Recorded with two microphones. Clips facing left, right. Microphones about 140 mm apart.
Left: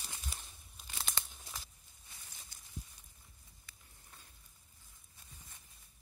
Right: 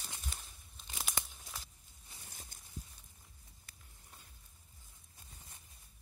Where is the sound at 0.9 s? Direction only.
10° right (ahead or behind).